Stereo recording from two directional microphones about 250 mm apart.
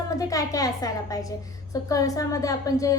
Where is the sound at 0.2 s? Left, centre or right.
Centre.